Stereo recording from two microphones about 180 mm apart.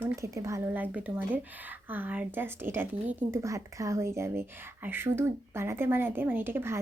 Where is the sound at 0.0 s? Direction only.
15° right (ahead or behind).